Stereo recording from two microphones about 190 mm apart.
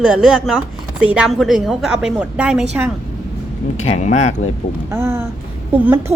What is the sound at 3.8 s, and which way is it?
Speech, 40° left (ahead or behind).